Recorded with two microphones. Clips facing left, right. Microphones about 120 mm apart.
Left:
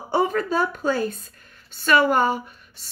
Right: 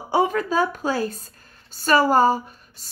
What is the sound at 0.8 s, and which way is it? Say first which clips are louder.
A woman's voice: left 1 dB; 40° right (ahead or behind).